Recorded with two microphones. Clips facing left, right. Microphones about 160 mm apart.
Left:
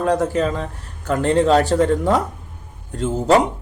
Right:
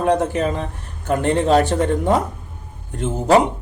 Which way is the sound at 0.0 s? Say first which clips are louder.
Even; 25° right (ahead or behind).